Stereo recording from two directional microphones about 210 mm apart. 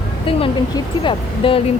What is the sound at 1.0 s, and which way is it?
Speech, 25° left (ahead or behind).